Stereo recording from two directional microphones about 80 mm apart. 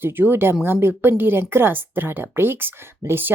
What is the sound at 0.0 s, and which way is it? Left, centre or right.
Speech, right.